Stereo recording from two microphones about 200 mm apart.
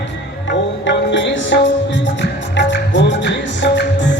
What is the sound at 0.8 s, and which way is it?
Music, 65° left (ahead or behind).